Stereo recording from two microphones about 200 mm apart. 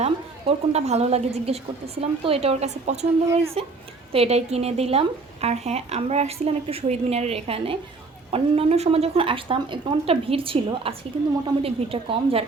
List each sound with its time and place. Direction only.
0.0 s speech: 30° right (ahead or behind)